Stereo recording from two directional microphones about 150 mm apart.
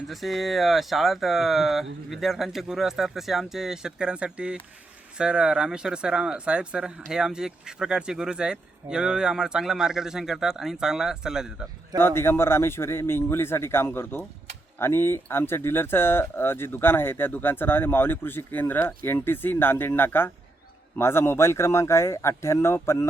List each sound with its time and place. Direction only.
0.1 s speech: centre (ahead or behind)
11.9 s speech: 15° left (ahead or behind)